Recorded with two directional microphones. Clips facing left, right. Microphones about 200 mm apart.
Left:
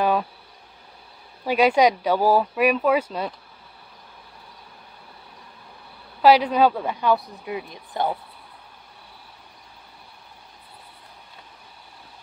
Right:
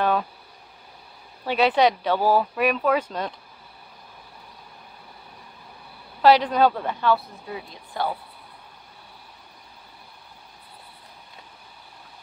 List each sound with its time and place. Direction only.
0.0 s insect: 10° left (ahead or behind)
1.4 s speech: 10° left (ahead or behind)
6.2 s speech: 10° left (ahead or behind)